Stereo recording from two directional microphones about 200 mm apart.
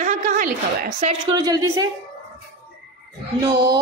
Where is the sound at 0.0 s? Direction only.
40° right (ahead or behind).